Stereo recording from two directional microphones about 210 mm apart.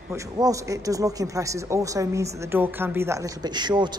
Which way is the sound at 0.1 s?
15° right (ahead or behind).